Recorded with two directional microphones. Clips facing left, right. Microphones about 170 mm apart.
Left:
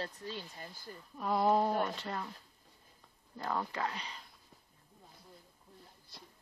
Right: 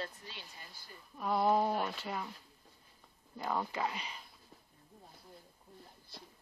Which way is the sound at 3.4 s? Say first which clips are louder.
Even; 5° right (ahead or behind).